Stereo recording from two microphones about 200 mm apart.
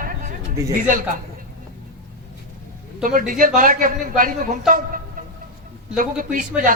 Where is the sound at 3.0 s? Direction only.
45° right (ahead or behind).